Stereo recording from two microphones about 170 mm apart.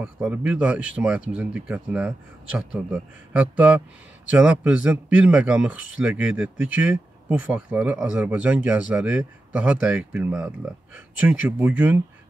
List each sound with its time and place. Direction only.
0.0 s speech: 5° right (ahead or behind)